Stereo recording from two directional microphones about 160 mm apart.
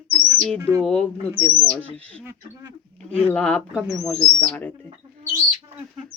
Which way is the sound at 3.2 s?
10° left (ahead or behind).